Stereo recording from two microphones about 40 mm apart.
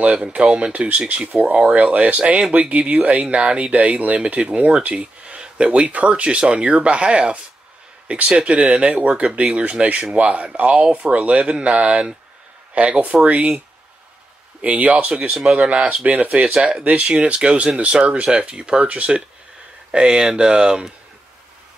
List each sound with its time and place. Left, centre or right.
0.4 s speech: right
0.7 s speech: right
1.8 s speech: right
3.7 s speech: right
14.6 s speech: right
16.5 s speech: right